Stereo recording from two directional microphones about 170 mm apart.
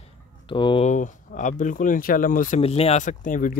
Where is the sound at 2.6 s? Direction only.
35° left (ahead or behind).